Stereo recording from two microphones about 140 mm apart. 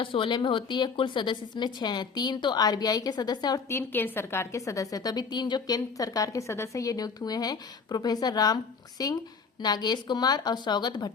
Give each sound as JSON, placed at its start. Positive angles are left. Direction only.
{"t": 0.0, "sound": "a woman's voice", "side_deg": 35}
{"t": 3.7, "sound": "a woman's voice", "side_deg": 15}